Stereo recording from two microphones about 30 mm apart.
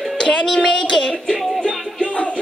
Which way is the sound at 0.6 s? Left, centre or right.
Left.